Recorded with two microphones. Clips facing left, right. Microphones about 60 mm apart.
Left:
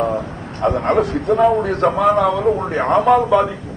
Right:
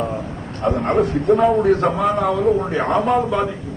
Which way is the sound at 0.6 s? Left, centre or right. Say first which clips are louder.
Left 2 dB; left.